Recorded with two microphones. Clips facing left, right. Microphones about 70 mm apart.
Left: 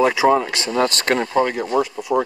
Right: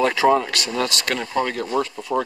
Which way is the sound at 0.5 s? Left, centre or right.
Left.